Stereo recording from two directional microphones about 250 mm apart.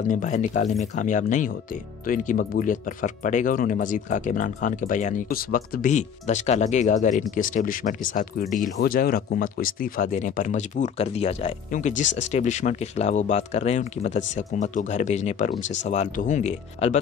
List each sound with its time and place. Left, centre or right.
0.1 s speech: left